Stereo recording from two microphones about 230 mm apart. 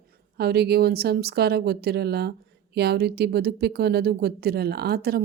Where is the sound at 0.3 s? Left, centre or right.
Right.